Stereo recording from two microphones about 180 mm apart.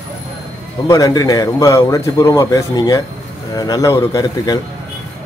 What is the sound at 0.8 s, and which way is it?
A man's voice, 20° left (ahead or behind).